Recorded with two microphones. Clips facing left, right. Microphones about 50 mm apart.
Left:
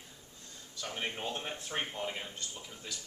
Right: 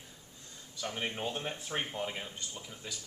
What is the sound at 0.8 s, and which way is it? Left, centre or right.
A man's voice, centre.